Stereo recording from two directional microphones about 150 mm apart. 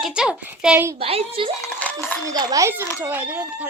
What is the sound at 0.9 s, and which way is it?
Speech, 40° right (ahead or behind).